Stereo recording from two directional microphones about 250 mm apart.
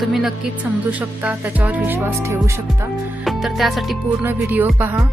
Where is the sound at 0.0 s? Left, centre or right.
Centre.